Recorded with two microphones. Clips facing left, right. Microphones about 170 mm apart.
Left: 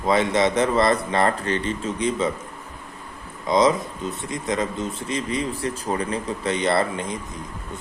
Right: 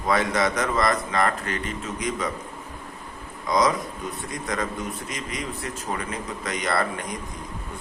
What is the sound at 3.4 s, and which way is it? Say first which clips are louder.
Speech: left 4 dB; 25° left (ahead or behind).